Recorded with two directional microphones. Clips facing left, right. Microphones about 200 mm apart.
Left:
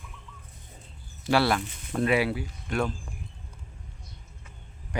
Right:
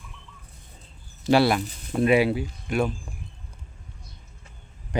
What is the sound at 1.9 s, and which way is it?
Speech, 15° right (ahead or behind).